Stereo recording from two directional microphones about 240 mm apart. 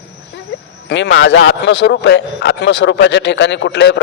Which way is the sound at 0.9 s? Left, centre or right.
Left.